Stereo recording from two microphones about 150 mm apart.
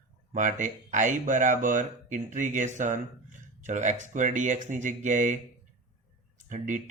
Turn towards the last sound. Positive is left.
turn(degrees=-60)  # may be behind; listen again after turning